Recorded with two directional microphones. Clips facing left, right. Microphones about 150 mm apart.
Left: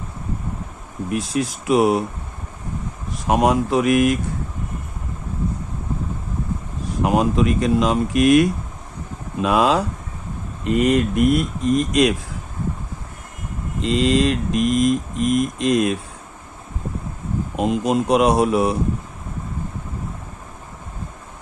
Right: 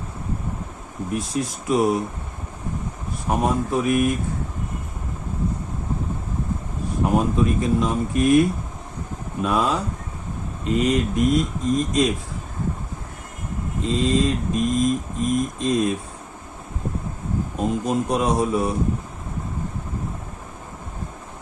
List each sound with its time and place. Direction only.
1.1 s mantra: 75° left (ahead or behind)
3.2 s speech: 85° left
7.0 s speech: 85° left
10.7 s speech: 60° left (ahead or behind)
13.8 s mantra: 80° left
17.6 s mantra: 85° left